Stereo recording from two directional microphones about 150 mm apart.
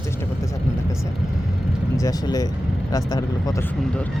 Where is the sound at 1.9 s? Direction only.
25° left (ahead or behind).